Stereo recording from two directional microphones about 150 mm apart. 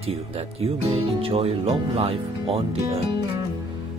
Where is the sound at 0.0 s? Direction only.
40° right (ahead or behind).